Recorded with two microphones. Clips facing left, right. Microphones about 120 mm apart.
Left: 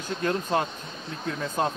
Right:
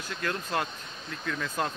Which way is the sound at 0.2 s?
25° left (ahead or behind).